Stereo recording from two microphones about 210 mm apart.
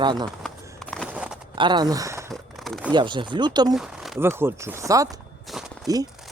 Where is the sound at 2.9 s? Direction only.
20° right (ahead or behind).